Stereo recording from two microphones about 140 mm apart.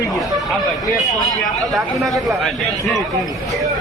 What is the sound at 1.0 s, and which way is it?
A man's voice, centre (ahead or behind).